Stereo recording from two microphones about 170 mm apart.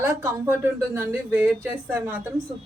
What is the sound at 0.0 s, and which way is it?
Speech, 15° right (ahead or behind).